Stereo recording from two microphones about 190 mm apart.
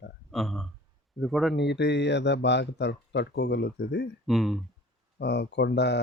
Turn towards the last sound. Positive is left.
turn(degrees=65)  # may be behind; listen again after turning